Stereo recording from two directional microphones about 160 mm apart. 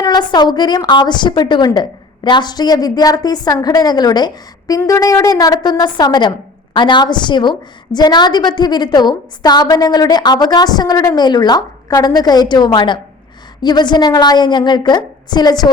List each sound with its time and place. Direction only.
0.0 s a woman's voice: 25° left (ahead or behind)